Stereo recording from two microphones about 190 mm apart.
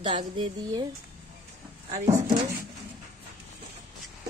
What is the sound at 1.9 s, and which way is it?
Speech, 15° right (ahead or behind).